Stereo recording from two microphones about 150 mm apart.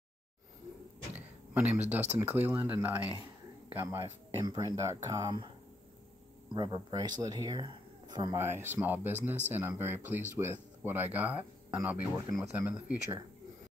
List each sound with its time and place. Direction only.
1.5 s speech: 10° right (ahead or behind); by 5.5 s 25° right (ahead or behind)
6.5 s speech: 30° right (ahead or behind)
8.4 s speech: 15° right (ahead or behind)